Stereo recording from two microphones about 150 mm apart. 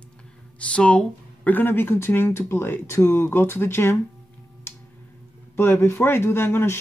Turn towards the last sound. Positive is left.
turn(degrees=15)  # may be behind; listen again after turning